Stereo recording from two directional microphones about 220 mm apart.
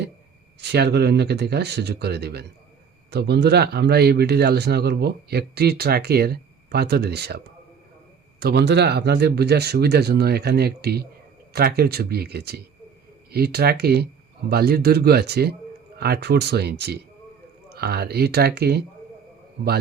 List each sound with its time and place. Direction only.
0.6 s speech: 50° right (ahead or behind)